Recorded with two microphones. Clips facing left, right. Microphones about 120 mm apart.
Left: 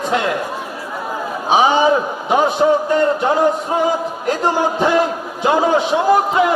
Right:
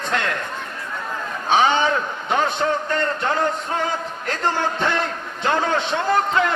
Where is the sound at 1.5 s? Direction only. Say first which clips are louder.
Left 5 dB; 10° left (ahead or behind).